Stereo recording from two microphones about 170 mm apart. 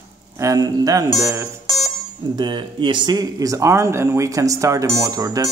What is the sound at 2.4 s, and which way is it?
Speech, 25° right (ahead or behind).